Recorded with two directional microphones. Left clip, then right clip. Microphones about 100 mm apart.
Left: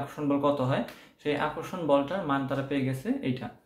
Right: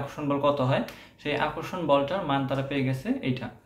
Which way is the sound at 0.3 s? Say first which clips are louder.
Right 2 dB; 30° left (ahead or behind).